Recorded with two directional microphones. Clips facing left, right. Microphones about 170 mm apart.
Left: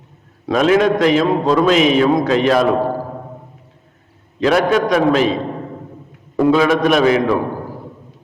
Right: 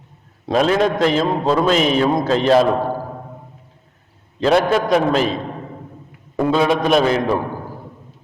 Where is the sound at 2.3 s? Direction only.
35° right (ahead or behind).